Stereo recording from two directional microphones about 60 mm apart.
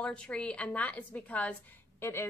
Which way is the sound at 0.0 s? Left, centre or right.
Centre.